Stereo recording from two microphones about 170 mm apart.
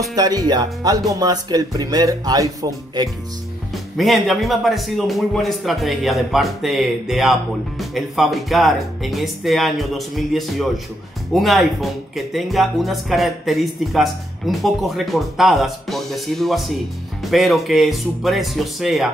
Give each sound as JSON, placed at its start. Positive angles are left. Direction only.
{"t": 0.1, "sound": "speech", "side_deg": -20}
{"t": 3.7, "sound": "speech", "side_deg": 0}